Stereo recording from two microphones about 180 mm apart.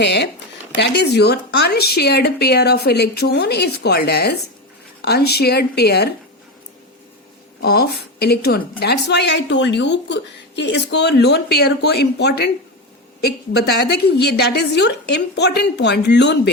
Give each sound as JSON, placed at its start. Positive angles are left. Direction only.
{"t": 0.0, "sound": "a woman's voice", "side_deg": 75}
{"t": 7.6, "sound": "a woman's voice", "side_deg": 60}